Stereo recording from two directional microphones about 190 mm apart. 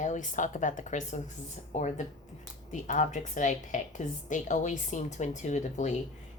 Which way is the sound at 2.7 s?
40° left (ahead or behind).